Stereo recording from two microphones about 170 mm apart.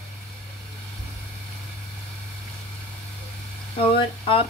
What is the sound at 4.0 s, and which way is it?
Speech, 30° left (ahead or behind).